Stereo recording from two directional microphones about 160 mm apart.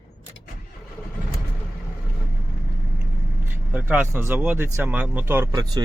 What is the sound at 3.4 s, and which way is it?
Speech, 10° right (ahead or behind).